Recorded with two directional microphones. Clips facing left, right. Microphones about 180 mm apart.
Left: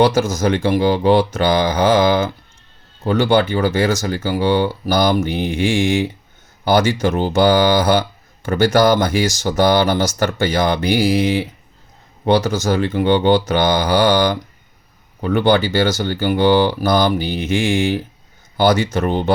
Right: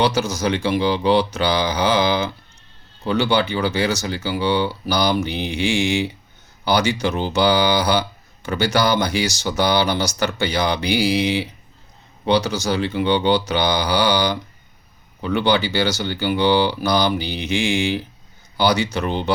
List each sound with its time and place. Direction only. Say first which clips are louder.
0.0 s speech: left 5 dB; 50° left (ahead or behind)